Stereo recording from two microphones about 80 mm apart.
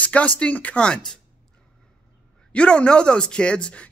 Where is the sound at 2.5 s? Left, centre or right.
Centre.